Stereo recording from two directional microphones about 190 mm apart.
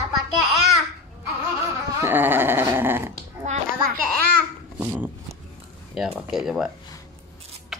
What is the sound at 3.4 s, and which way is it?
Hands, 35° right (ahead or behind).